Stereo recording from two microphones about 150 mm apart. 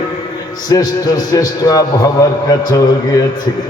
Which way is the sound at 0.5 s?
25° left (ahead or behind).